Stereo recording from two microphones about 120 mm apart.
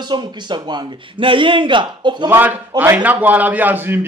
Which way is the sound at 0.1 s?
40° right (ahead or behind).